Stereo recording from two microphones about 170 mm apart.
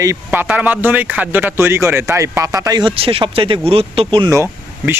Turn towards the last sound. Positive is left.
turn(degrees=-15)  # may be behind; listen again after turning